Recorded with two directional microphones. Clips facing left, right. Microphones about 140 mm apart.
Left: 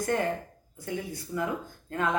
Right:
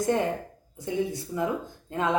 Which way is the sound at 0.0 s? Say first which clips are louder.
Right 3 dB; 20° right (ahead or behind).